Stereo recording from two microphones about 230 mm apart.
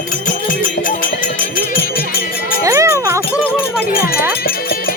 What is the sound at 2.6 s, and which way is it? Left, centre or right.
Music, centre.